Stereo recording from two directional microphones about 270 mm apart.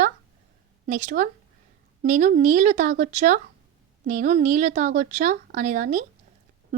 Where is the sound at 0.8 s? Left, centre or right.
Right.